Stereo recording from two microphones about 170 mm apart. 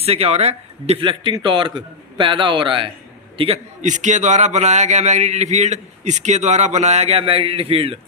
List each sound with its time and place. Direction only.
0.0 s a man's voice: 35° right (ahead or behind)